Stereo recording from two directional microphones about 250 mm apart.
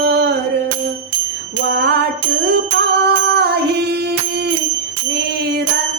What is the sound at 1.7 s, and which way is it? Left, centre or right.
Bicycle bell, right.